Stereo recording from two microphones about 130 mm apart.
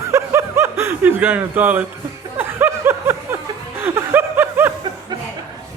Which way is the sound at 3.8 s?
15° right (ahead or behind).